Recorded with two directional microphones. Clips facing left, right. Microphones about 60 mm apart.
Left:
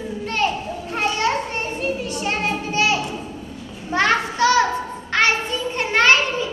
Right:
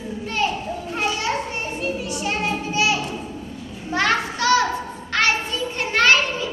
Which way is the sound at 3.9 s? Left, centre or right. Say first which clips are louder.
Left 2 dB; left.